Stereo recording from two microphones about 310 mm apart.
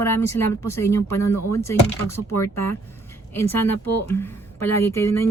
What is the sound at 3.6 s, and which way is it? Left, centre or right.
Speech, left.